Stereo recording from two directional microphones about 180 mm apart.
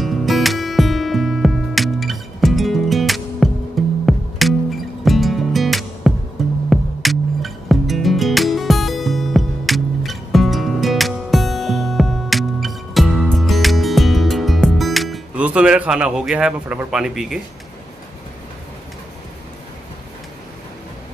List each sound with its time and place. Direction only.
0.0 s music: centre (ahead or behind)